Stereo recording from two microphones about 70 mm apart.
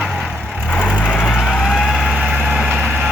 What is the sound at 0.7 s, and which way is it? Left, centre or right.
Vehicle, left.